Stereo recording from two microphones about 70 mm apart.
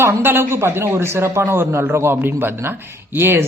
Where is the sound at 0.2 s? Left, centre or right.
Right.